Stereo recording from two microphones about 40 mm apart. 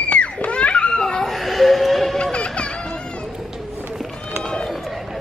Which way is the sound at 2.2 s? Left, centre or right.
Left.